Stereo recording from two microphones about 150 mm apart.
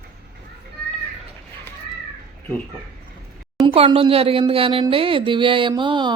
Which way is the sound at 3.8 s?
35° right (ahead or behind).